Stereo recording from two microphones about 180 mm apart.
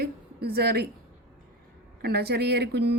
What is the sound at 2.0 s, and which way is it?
Speech, 65° right (ahead or behind).